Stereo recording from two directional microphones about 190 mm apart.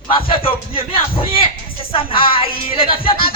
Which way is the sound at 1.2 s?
30° left (ahead or behind).